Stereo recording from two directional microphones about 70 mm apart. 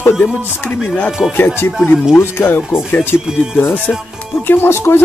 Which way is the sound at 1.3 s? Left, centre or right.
Left.